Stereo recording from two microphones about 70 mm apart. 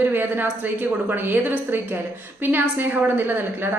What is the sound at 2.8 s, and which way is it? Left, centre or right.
Speech, right.